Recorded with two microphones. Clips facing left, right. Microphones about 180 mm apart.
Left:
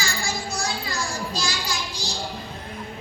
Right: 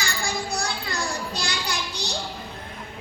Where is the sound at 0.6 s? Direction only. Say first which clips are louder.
Even; 60° right (ahead or behind).